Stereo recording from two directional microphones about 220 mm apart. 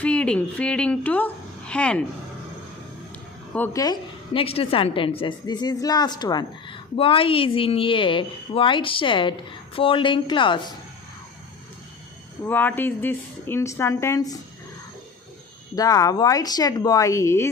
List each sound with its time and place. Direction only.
0.0 s a woman's voice: 5° left (ahead or behind)
3.5 s a woman's voice: 10° left (ahead or behind)
12.5 s speech: 10° left (ahead or behind)
15.7 s speech: 15° left (ahead or behind)